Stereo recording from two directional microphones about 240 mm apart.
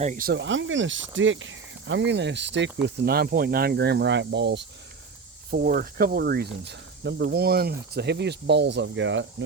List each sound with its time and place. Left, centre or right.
0.0 s speech: right